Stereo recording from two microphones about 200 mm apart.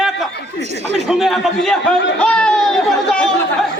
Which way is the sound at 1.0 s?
Centre (ahead or behind).